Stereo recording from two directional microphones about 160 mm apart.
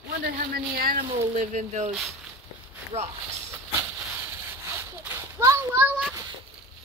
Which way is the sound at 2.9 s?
40° right (ahead or behind).